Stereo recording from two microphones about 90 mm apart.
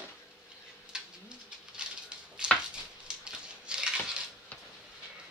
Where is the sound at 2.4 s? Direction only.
10° right (ahead or behind).